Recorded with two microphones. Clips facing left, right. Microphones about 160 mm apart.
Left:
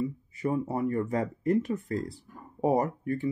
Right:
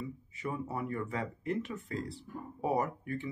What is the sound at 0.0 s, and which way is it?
Speech, 40° left (ahead or behind).